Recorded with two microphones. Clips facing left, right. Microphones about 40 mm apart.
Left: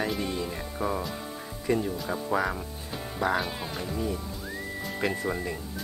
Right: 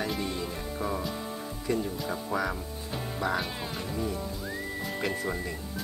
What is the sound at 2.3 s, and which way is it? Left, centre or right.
Speech, centre.